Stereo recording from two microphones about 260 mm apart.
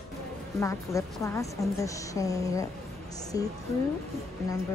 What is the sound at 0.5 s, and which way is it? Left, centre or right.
A woman's voice, centre.